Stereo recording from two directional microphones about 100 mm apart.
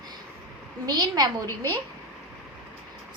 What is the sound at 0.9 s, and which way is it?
Speech, 40° right (ahead or behind).